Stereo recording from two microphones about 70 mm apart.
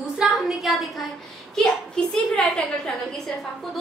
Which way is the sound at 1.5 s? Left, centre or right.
Centre.